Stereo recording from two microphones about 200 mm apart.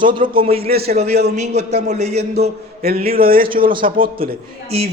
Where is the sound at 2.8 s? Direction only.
50° right (ahead or behind).